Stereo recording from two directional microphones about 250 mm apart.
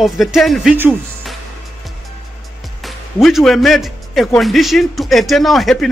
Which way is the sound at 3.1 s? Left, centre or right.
Centre.